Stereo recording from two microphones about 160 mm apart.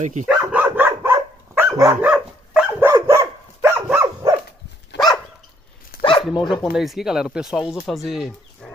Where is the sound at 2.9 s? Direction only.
20° right (ahead or behind).